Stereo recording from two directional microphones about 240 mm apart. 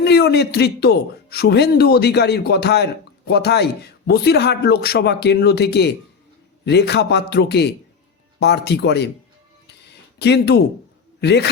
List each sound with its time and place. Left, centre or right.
0.0 s a man's voice: left
10.2 s a man's voice: left